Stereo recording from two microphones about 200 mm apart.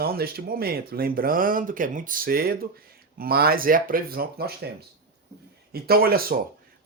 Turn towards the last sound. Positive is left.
turn(degrees=-50)  # may be behind; listen again after turning